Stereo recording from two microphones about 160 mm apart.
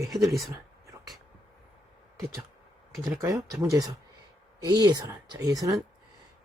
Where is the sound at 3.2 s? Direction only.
20° right (ahead or behind).